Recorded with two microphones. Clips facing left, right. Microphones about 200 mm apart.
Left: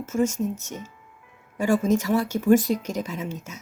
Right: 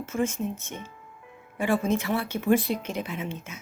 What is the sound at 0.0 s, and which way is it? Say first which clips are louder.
A woman's voice: left 4 dB; 45° left (ahead or behind).